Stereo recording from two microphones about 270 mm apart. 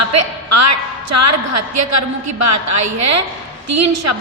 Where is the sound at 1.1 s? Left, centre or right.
Right.